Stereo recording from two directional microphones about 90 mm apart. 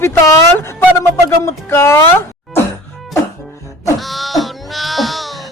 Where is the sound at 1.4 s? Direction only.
30° left (ahead or behind).